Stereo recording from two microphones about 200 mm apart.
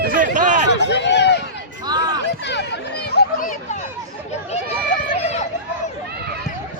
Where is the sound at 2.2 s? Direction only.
60° left (ahead or behind).